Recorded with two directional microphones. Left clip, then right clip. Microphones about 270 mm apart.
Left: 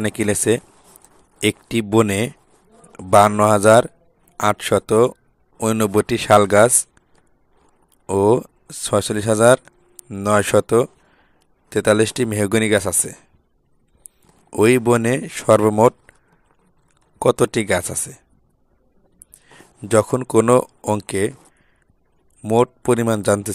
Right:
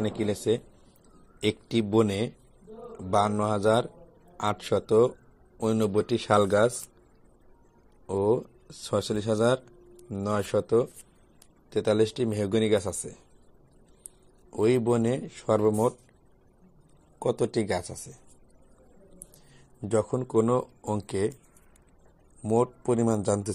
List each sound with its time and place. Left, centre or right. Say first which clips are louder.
0.0 s speech: left 9 dB; left
8.1 s speech: left 10 dB; left
14.5 s speech: left 9 dB; left
17.2 s speech: left 10 dB; left
19.9 s speech: left 10 dB; left
22.4 s speech: left 9 dB; left